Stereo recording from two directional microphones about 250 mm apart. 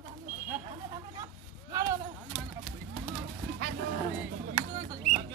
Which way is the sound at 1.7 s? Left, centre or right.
Centre.